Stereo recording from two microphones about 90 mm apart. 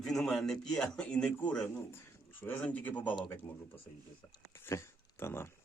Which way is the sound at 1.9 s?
25° left (ahead or behind).